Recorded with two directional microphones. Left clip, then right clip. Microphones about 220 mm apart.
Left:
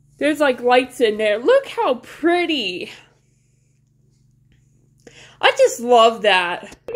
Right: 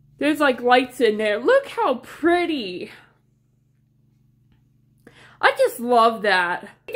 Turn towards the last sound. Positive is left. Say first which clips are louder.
# left 1 dB
turn(degrees=0)  # may be behind; listen again after turning